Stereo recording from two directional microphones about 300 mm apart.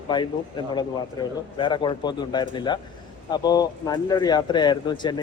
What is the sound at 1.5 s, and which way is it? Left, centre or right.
Speech, centre.